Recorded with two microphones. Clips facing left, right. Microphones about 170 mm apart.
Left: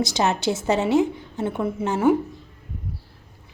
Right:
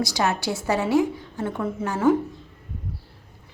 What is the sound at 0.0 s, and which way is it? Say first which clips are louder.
A woman's voice: left 2 dB; 25° left (ahead or behind).